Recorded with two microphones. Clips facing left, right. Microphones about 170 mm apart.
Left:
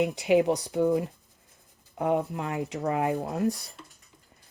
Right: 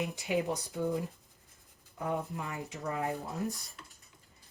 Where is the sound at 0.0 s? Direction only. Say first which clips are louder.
Left 10 dB; 65° left (ahead or behind).